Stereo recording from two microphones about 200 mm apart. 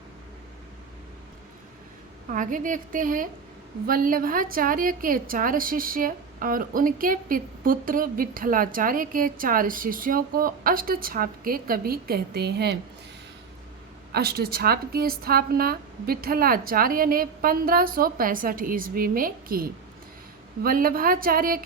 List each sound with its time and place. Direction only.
2.3 s a woman's voice: 40° right (ahead or behind)
14.1 s a woman's voice: 50° right (ahead or behind)